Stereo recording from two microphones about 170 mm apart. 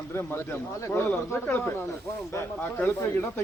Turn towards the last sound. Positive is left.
turn(degrees=15)  # may be behind; listen again after turning